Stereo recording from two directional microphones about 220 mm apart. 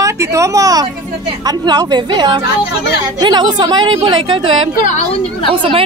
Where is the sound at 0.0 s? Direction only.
15° right (ahead or behind).